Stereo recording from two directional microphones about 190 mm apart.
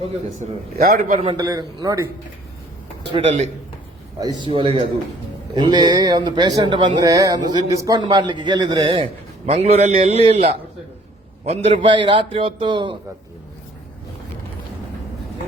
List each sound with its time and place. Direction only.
0.8 s a man's voice: 50° right (ahead or behind)
1.2 s speech: 25° right (ahead or behind)
3.1 s a man's voice: 35° right (ahead or behind)
4.2 s a man's voice: 20° right (ahead or behind)